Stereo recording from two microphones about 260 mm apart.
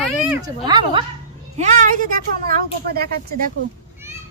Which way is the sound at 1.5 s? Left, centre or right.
Right.